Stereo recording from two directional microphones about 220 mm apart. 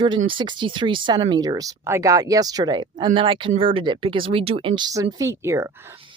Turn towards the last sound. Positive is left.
turn(degrees=-10)  # may be behind; listen again after turning